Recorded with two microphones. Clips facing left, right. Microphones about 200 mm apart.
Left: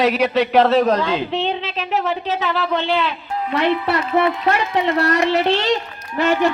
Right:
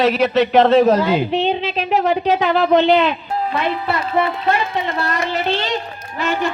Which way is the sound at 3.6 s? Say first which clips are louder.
Left 6 dB; 80° left.